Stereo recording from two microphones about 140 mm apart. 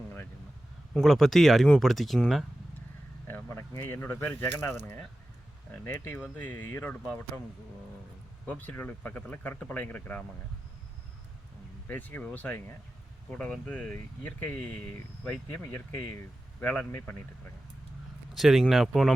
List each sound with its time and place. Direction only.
0.9 s speech: centre (ahead or behind)
3.2 s speech: 15° left (ahead or behind)
8.4 s speech: 10° left (ahead or behind)
11.9 s speech: 10° left (ahead or behind)
18.3 s speech: centre (ahead or behind)